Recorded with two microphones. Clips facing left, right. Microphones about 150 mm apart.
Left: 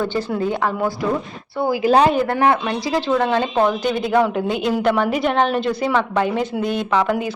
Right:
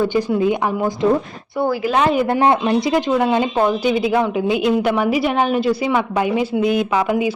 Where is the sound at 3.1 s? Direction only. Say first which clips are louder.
Right 2 dB; 10° right (ahead or behind).